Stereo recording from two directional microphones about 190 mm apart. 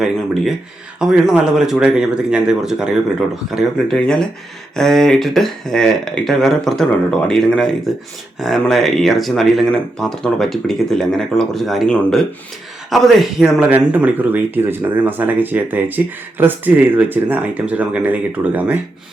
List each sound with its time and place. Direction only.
0.9 s speech: 5° right (ahead or behind)